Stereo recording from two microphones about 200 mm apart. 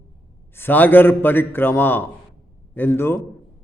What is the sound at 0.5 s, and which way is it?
A man's voice, 10° left (ahead or behind).